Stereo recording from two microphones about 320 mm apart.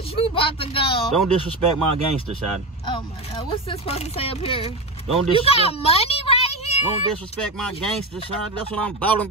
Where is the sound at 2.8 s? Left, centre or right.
Centre.